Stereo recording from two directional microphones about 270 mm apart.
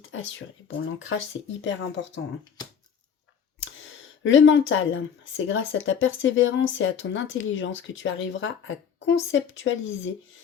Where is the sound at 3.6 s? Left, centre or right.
Left.